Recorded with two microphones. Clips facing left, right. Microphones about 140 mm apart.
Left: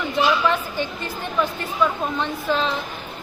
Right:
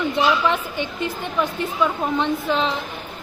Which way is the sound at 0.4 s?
20° right (ahead or behind).